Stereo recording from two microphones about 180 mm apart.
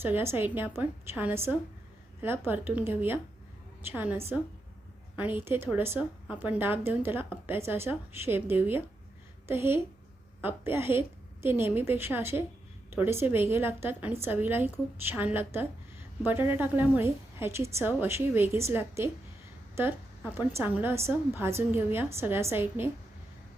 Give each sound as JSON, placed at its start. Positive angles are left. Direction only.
{"t": 0.0, "sound": "a woman's voice", "side_deg": -15}